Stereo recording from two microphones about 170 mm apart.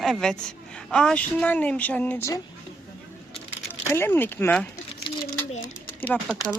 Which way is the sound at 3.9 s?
15° left (ahead or behind).